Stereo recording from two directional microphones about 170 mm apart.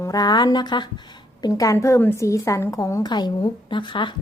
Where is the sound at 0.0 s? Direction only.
20° left (ahead or behind).